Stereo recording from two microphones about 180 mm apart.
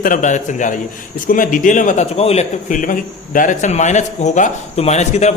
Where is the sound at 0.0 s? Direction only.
45° left (ahead or behind).